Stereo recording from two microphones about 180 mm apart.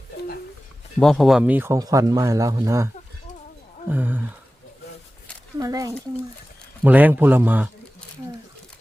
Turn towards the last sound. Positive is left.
turn(degrees=-10)  # may be behind; listen again after turning